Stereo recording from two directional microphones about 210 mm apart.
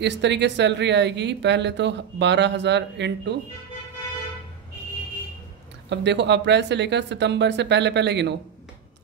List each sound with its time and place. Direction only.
0.0 s speech: 55° right (ahead or behind)
5.9 s speech: 55° right (ahead or behind)